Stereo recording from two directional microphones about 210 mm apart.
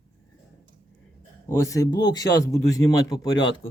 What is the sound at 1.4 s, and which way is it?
Speech, 15° left (ahead or behind).